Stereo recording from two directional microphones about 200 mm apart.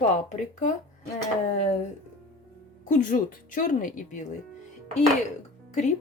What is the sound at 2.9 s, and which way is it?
A woman's voice, 40° left (ahead or behind).